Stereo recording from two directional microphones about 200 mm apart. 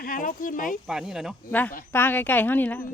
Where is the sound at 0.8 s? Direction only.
5° right (ahead or behind).